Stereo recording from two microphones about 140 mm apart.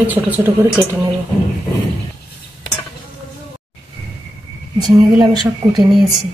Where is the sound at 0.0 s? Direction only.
10° right (ahead or behind).